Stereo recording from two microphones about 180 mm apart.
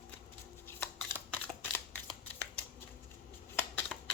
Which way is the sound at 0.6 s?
10° left (ahead or behind).